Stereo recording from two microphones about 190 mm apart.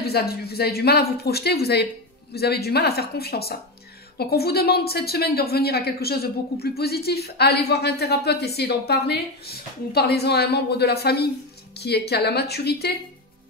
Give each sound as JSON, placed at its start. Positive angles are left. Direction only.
{"t": 0.0, "sound": "a woman's voice", "side_deg": 55}